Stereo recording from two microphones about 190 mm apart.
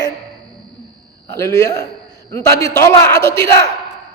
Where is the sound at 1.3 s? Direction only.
15° left (ahead or behind).